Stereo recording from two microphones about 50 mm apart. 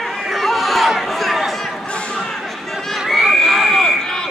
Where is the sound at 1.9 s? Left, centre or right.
Left.